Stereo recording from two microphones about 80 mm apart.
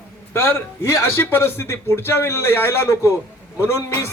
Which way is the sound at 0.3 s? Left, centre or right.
Left.